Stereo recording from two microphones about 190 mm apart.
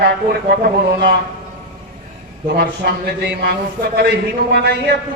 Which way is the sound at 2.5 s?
60° right (ahead or behind).